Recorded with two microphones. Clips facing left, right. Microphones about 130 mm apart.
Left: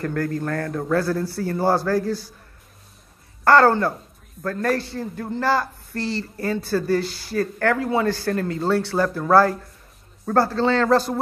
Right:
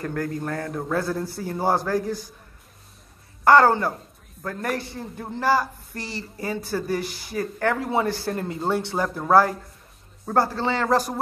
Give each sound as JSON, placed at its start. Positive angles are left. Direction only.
{"t": 0.0, "sound": "speech", "side_deg": -20}
{"t": 3.4, "sound": "speech", "side_deg": -15}